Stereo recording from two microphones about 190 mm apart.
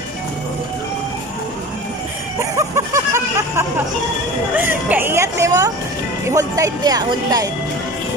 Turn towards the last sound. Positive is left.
turn(degrees=-20)  # may be behind; listen again after turning